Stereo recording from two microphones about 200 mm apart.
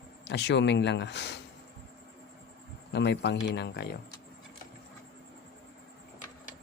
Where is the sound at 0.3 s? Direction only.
60° left (ahead or behind).